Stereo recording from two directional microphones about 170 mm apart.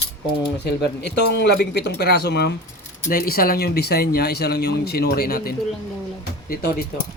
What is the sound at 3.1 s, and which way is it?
Speech, 60° left (ahead or behind).